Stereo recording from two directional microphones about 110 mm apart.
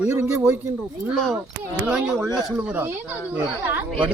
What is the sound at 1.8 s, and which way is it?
Speech, 15° right (ahead or behind).